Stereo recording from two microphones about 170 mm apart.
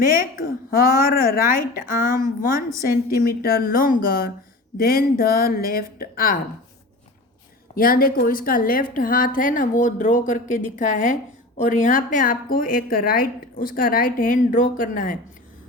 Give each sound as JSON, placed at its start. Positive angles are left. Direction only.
{"t": 0.0, "sound": "a woman's voice", "side_deg": 55}
{"t": 7.8, "sound": "a woman's voice", "side_deg": 60}